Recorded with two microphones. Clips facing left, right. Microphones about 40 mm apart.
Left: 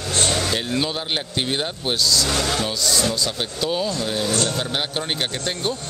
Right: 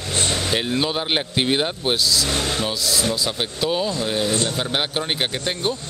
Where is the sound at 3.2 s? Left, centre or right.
Centre.